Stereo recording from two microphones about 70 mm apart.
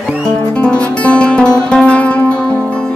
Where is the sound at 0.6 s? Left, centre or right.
Centre.